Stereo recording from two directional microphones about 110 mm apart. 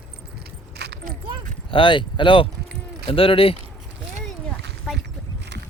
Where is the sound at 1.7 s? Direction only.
50° left (ahead or behind).